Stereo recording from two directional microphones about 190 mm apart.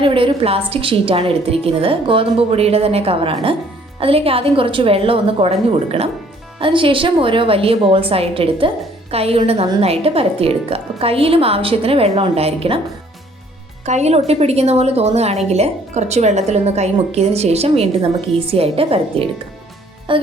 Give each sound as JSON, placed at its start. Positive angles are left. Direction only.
{"t": 0.0, "sound": "a woman's voice", "side_deg": -25}
{"t": 13.8, "sound": "a woman's voice", "side_deg": -35}